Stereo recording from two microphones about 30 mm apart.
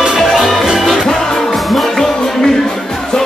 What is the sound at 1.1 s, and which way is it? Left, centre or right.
Music, centre.